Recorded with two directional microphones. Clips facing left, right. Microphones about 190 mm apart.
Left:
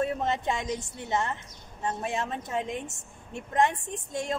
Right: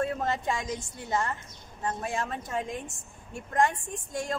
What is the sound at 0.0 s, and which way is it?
A woman's voice, 20° left (ahead or behind).